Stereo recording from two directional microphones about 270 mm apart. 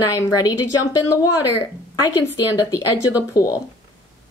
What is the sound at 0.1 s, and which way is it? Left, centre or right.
Speech, centre.